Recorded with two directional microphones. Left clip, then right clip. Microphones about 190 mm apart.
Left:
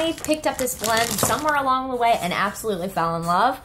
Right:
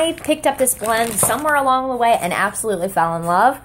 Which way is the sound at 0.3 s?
40° right (ahead or behind).